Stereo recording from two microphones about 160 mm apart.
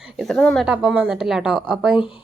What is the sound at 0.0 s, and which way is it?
A woman's voice, centre (ahead or behind).